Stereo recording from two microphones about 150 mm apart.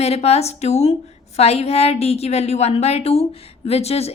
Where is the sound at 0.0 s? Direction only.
45° left (ahead or behind).